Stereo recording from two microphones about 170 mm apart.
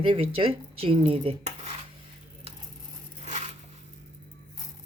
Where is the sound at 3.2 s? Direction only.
40° right (ahead or behind).